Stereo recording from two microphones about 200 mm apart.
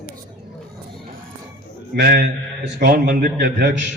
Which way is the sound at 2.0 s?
55° right (ahead or behind).